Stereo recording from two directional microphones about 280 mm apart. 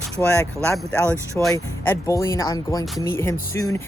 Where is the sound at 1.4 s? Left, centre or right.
Centre.